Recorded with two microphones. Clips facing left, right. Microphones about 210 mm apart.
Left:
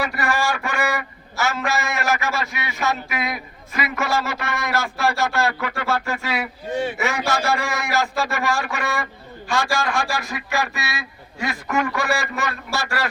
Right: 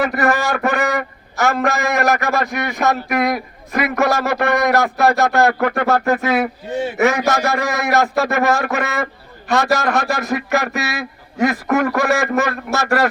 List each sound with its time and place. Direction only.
0.0 s a man's voice: 55° right (ahead or behind)